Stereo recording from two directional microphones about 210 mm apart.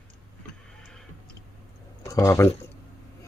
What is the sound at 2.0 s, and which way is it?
Speech, 15° left (ahead or behind).